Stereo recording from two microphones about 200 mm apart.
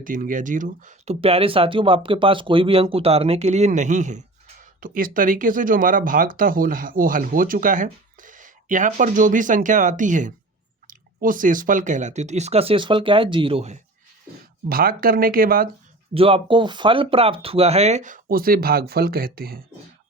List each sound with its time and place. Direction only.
0.0 s speech: 40° right (ahead or behind)
14.7 s speech: 45° right (ahead or behind)
16.1 s speech: 30° right (ahead or behind); by 19.6 s 50° right (ahead or behind)